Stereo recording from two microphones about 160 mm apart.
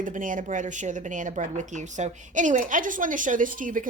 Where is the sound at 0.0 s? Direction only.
55° right (ahead or behind).